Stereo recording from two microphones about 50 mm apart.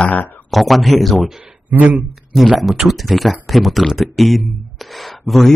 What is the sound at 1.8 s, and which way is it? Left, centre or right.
Speech, right.